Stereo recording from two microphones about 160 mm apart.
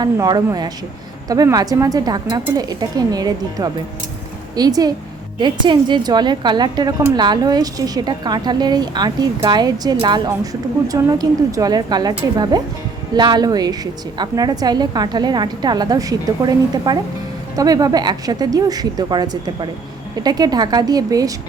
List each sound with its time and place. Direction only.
0.0 s a woman's voice: 25° right (ahead or behind)